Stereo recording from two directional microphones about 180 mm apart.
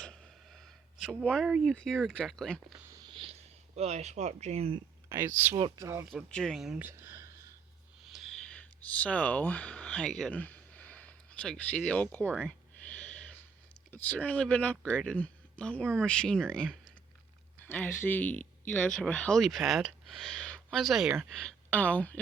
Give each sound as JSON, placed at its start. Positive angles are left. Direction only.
{"t": 0.0, "sound": "a sound", "side_deg": 5}
{"t": 1.2, "sound": "speech", "side_deg": 0}
{"t": 2.7, "sound": "a sound", "side_deg": -20}
{"t": 3.8, "sound": "speech", "side_deg": -35}
{"t": 5.0, "sound": "speech", "side_deg": -15}
{"t": 6.1, "sound": "speech", "side_deg": 0}
{"t": 8.0, "sound": "a sound", "side_deg": 0}
{"t": 13.9, "sound": "speech", "side_deg": 10}
{"t": 21.3, "sound": "speech", "side_deg": 5}